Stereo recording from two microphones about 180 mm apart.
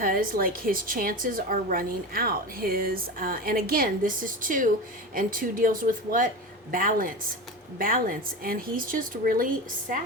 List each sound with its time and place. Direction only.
0.0 s a woman's voice: 50° right (ahead or behind)